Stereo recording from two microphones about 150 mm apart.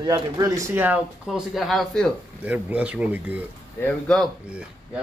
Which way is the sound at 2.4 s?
10° right (ahead or behind).